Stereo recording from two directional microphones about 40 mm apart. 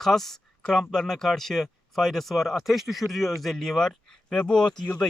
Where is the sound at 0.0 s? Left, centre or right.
Centre.